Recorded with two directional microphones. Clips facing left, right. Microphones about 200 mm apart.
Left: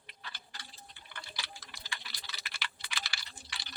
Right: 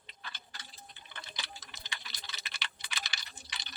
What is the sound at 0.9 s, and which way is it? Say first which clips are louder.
Typing: left 1 dB; 20° right (ahead or behind).